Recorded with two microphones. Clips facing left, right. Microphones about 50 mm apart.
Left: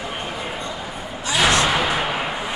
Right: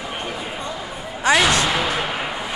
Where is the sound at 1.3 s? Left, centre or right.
Right.